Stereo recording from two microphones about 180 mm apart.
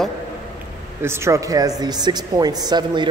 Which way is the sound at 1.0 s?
15° right (ahead or behind).